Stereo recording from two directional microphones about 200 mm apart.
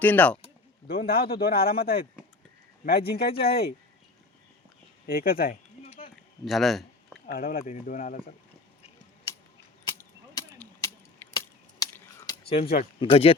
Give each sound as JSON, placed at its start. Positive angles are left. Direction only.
{"t": 0.0, "sound": "speech", "side_deg": 10}
{"t": 0.9, "sound": "a man's voice", "side_deg": 50}
{"t": 5.0, "sound": "a man's voice", "side_deg": 45}
{"t": 6.4, "sound": "speech", "side_deg": 0}
{"t": 7.3, "sound": "a man's voice", "side_deg": 45}
{"t": 10.0, "sound": "a sound", "side_deg": 15}
{"t": 13.0, "sound": "speech", "side_deg": 30}